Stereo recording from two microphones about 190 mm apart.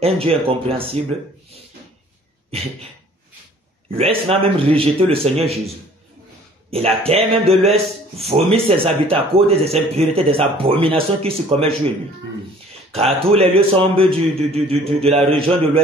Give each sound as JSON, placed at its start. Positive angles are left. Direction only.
{"t": 0.0, "sound": "a man's voice", "side_deg": -30}
{"t": 2.5, "sound": "a man's voice", "side_deg": -30}
{"t": 3.9, "sound": "a man's voice", "side_deg": -30}
{"t": 6.7, "sound": "a man's voice", "side_deg": -30}
{"t": 13.2, "sound": "a man's voice", "side_deg": -30}